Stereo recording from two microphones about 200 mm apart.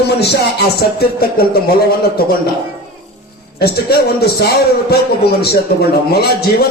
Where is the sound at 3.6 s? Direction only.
55° left (ahead or behind).